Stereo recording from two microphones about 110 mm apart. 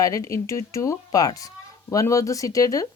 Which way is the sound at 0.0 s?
30° left (ahead or behind).